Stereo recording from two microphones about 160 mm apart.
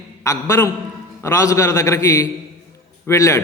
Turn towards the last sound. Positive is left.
turn(degrees=20)  # may be behind; listen again after turning